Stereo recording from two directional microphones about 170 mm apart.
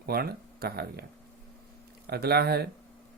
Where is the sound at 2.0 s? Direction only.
70° right (ahead or behind).